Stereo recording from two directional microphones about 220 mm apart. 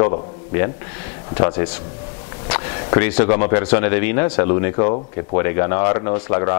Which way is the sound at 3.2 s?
30° left (ahead or behind).